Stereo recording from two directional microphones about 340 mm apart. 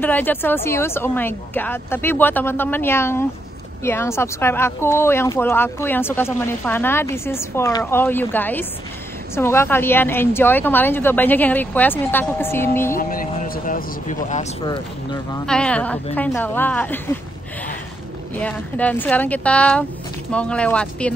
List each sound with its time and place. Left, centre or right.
0.0 s a woman's voice: centre
12.9 s speech: left
15.4 s a woman's voice: centre
18.3 s a woman's voice: centre